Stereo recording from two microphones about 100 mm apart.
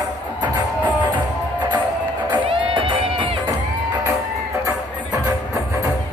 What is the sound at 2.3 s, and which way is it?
Music, 60° right (ahead or behind).